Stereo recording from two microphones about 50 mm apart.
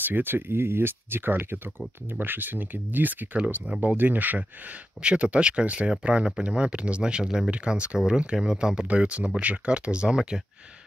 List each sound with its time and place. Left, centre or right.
0.0 s speech: right
3.3 s speech: right
3.8 s speech: right; by 10.4 s centre